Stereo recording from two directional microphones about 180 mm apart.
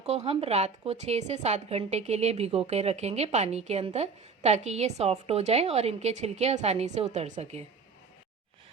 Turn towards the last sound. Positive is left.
turn(degrees=-35)  # may be behind; listen again after turning